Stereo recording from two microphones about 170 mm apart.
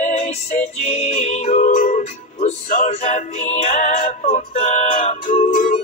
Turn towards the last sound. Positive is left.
turn(degrees=50)  # may be behind; listen again after turning